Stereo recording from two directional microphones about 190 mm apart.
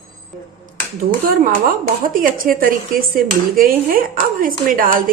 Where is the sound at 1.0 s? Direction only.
50° right (ahead or behind).